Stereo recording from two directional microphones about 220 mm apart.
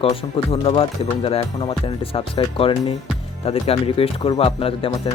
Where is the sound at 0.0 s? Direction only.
25° left (ahead or behind).